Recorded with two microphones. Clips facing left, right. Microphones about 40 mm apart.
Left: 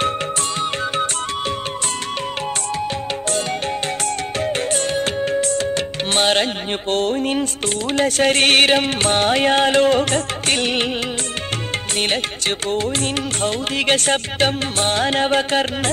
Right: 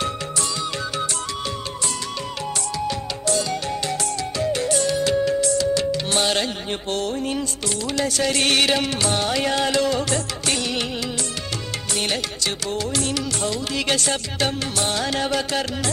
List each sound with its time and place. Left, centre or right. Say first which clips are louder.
4.4 s music: even; left
11.9 s music: left 3 dB; left